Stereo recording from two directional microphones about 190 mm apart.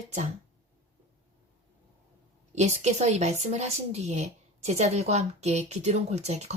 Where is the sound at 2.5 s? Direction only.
35° right (ahead or behind).